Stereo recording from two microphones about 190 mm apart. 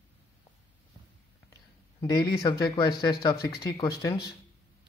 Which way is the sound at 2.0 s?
20° left (ahead or behind).